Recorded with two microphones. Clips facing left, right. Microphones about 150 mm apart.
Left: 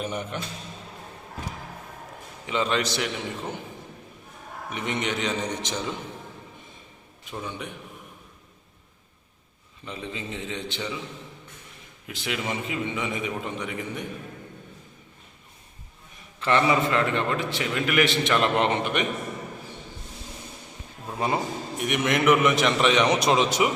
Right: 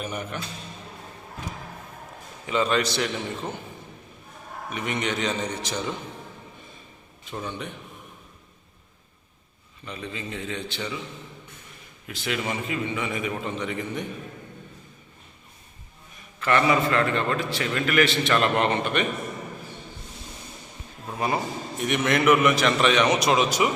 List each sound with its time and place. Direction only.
0.0 s a man's voice: 25° left (ahead or behind)
2.5 s a man's voice: 20° left (ahead or behind)
4.7 s a man's voice: 20° left (ahead or behind)
7.3 s a man's voice: 10° left (ahead or behind)
9.8 s a man's voice: 20° left (ahead or behind)
12.0 s a man's voice: 15° left (ahead or behind)
16.4 s a man's voice: 25° left (ahead or behind)
21.2 s a man's voice: 20° left (ahead or behind)